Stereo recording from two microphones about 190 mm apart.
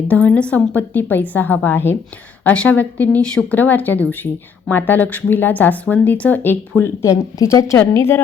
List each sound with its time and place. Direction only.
0.1 s a woman's voice: 5° left (ahead or behind)